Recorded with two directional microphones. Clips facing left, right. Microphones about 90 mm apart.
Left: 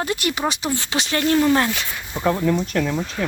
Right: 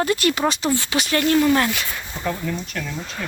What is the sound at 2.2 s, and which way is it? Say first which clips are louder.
Speech: left 7 dB; 30° left (ahead or behind).